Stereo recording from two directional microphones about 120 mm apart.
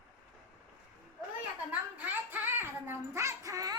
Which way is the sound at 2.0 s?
20° right (ahead or behind).